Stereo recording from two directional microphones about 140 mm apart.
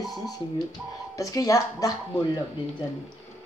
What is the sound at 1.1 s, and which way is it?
Throat clearing, 25° left (ahead or behind).